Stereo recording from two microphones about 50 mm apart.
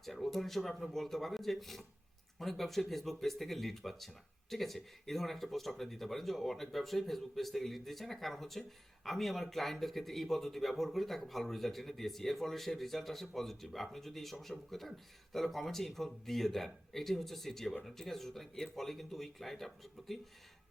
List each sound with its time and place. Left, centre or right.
0.0 s speech: centre